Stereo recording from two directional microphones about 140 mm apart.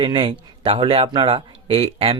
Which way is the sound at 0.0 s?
35° right (ahead or behind).